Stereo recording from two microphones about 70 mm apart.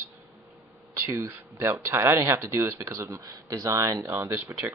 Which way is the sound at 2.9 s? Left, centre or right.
Right.